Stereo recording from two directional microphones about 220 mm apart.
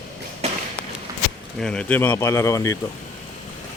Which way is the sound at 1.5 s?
5° left (ahead or behind).